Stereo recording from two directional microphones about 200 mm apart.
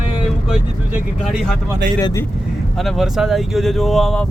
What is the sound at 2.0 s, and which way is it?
Speech, 20° left (ahead or behind).